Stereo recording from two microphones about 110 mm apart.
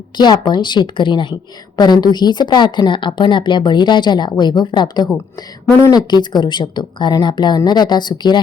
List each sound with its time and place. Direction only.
0.2 s a woman's voice: 40° left (ahead or behind)